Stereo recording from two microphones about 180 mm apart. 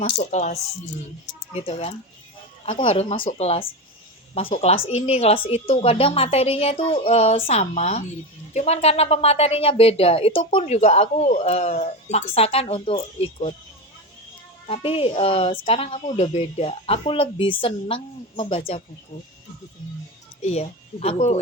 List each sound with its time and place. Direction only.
0.2 s speech: 40° left (ahead or behind)
14.7 s speech: 30° left (ahead or behind)
20.4 s speech: 35° left (ahead or behind)